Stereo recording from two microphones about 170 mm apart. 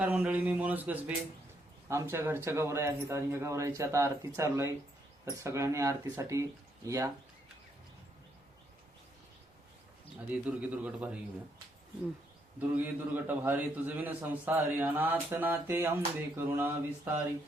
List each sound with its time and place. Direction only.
0.0 s a man's voice: 10° right (ahead or behind)
10.3 s a man's voice: 10° right (ahead or behind)
12.5 s a man's voice: 10° right (ahead or behind)